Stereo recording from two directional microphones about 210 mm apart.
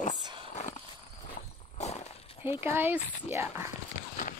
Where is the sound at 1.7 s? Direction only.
30° left (ahead or behind).